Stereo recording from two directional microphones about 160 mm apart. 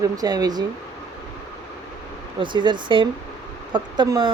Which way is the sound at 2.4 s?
30° right (ahead or behind).